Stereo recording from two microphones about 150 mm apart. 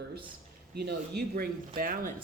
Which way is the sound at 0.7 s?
90° right.